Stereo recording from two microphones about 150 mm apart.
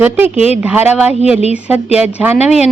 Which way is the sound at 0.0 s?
10° right (ahead or behind).